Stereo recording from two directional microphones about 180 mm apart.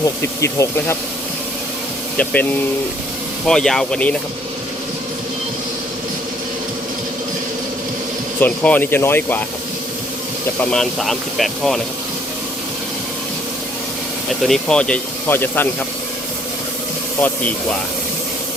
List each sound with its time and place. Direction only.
0.0 s speech: 15° left (ahead or behind)
2.1 s speech: 10° left (ahead or behind)
8.4 s speech: 10° left (ahead or behind)
10.6 s speech: 5° left (ahead or behind)
14.4 s speech: 5° left (ahead or behind)
17.2 s speech: 10° left (ahead or behind)